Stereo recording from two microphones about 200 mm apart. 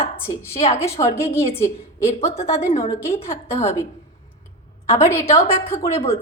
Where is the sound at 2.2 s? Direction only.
35° left (ahead or behind).